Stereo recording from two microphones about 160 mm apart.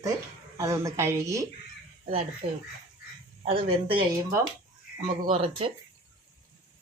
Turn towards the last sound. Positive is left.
turn(degrees=-35)  # may be behind; listen again after turning